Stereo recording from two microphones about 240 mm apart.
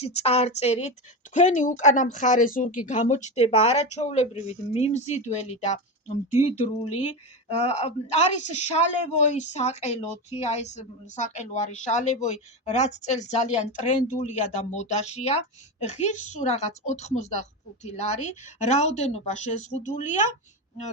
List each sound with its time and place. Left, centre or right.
0.0 s a woman's voice: left
7.5 s a woman's voice: left